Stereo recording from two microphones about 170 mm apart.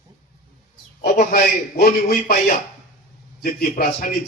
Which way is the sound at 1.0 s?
60° left (ahead or behind).